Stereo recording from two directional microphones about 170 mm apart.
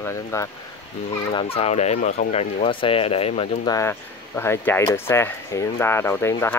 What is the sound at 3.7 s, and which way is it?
Speech, 15° left (ahead or behind).